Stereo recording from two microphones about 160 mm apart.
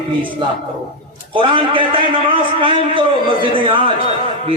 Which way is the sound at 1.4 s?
30° right (ahead or behind).